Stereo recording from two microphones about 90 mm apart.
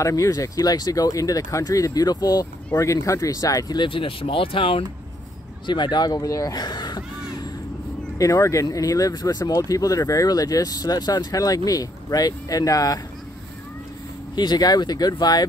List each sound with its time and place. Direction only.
0.0 s speech: 40° left (ahead or behind)
3.9 s speech: 75° left (ahead or behind)
5.7 s speech: 55° left (ahead or behind)
8.2 s speech: 35° left (ahead or behind)
14.3 s speech: 50° left (ahead or behind)